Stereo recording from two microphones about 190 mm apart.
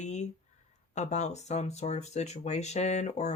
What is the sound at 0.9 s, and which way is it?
Speech, 40° left (ahead or behind).